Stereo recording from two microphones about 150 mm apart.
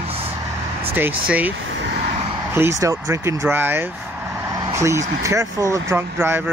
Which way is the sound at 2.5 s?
20° right (ahead or behind).